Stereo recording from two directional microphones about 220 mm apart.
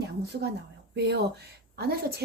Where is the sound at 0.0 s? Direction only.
50° right (ahead or behind).